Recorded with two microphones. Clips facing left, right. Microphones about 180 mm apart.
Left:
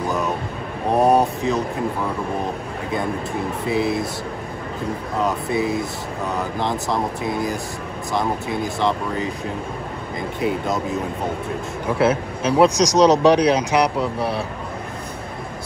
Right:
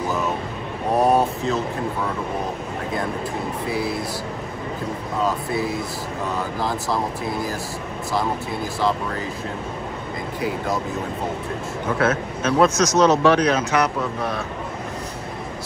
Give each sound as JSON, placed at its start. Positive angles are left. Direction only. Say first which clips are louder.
{"t": 0.9, "sound": "a sound", "louder": "left 2 dB", "side_deg": 0}
{"t": 3.6, "sound": "speech", "louder": "left 5 dB", "side_deg": 20}
{"t": 5.2, "sound": "speech", "louder": "left 2 dB", "side_deg": 20}
{"t": 6.9, "sound": "speech", "louder": "left 1 dB", "side_deg": 20}
{"t": 8.7, "sound": "speech", "louder": "right 1 dB", "side_deg": 20}
{"t": 12.0, "sound": "speech", "louder": "left 3 dB", "side_deg": 10}